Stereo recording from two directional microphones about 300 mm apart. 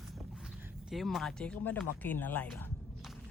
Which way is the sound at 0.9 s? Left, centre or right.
Centre.